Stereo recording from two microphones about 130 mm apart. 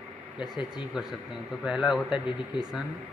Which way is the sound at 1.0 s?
5° right (ahead or behind).